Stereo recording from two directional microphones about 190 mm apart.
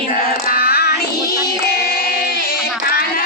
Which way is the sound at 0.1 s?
50° left (ahead or behind).